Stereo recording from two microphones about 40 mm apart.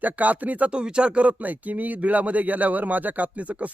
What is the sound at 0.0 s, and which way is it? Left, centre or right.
Speech, right.